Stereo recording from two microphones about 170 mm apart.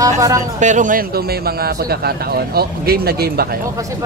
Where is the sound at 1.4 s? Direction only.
65° right (ahead or behind).